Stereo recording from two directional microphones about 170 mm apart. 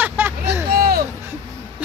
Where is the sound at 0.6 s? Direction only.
65° right (ahead or behind).